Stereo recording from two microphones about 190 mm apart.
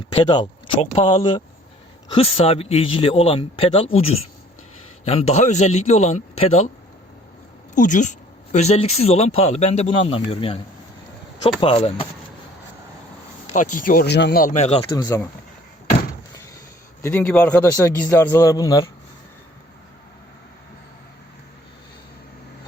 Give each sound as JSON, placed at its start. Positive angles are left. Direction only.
{"t": 0.1, "sound": "speech", "side_deg": 25}
{"t": 7.8, "sound": "speech", "side_deg": 45}
{"t": 11.6, "sound": "speech", "side_deg": 30}
{"t": 13.5, "sound": "speech", "side_deg": 45}
{"t": 14.9, "sound": "speech", "side_deg": 20}
{"t": 17.0, "sound": "a man's voice", "side_deg": 10}